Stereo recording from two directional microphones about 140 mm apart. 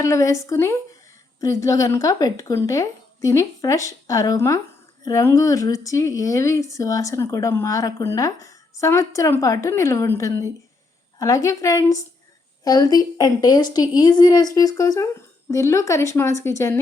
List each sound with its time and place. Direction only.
0.0 s speech: 20° left (ahead or behind)